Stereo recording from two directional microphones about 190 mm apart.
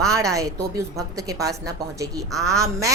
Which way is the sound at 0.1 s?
15° right (ahead or behind).